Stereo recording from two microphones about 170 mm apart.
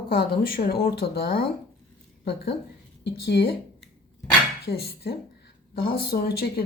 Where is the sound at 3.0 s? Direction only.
75° left (ahead or behind).